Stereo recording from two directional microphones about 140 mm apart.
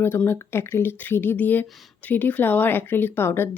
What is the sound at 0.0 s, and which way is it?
Speech, 15° left (ahead or behind).